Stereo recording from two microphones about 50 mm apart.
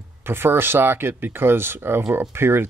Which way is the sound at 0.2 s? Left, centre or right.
Right.